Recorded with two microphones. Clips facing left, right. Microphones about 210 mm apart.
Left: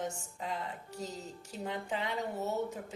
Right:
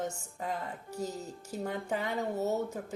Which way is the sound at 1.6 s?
45° right (ahead or behind).